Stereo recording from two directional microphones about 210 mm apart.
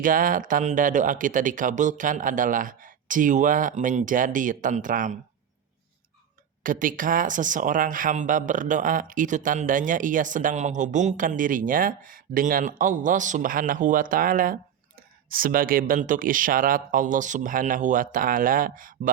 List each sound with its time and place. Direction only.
0.0 s speech: 40° right (ahead or behind)
6.6 s speech: 40° right (ahead or behind)